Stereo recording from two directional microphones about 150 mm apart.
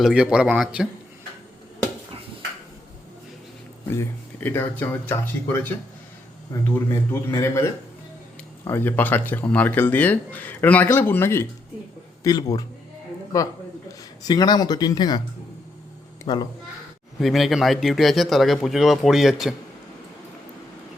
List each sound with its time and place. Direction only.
0.0 s a man's voice: 5° right (ahead or behind)
3.8 s a man's voice: 15° left (ahead or behind)
16.2 s speech: 30° left (ahead or behind)
17.2 s a man's voice: centre (ahead or behind)